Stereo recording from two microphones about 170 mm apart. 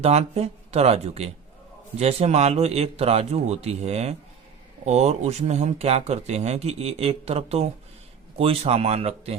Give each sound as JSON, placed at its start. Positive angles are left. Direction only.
{"t": 0.0, "sound": "speech", "side_deg": -40}